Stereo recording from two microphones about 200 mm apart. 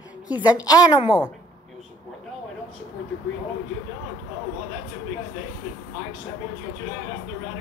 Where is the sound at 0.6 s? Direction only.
20° left (ahead or behind).